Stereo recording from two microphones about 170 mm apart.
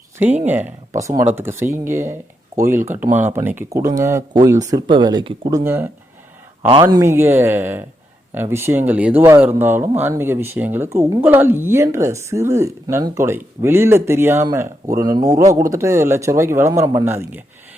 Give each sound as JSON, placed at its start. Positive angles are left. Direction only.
{"t": 0.4, "sound": "speech", "side_deg": -10}
{"t": 6.9, "sound": "speech", "side_deg": -15}